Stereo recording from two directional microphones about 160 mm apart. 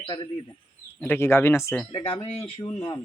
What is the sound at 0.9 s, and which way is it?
Speech, 15° left (ahead or behind).